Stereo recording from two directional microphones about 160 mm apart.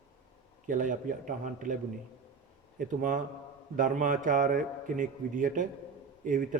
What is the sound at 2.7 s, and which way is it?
A man's voice, 55° right (ahead or behind).